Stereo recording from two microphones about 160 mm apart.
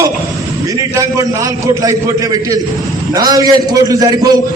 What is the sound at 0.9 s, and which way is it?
A man's voice, 20° right (ahead or behind).